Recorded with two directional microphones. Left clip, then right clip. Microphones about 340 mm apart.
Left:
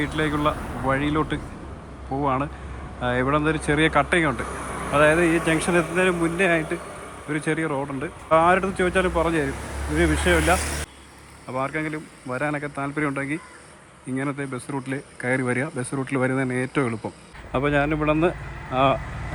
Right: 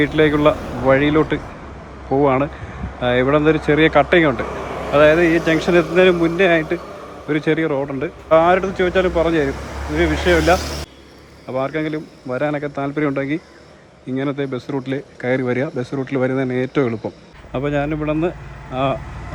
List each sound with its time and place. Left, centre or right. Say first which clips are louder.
0.0 s speech: right 9 dB; centre